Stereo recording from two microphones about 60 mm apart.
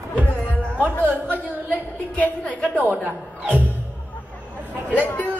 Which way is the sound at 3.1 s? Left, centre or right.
Right.